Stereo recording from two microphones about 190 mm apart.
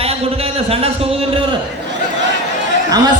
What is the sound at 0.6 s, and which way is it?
Speech, 30° right (ahead or behind).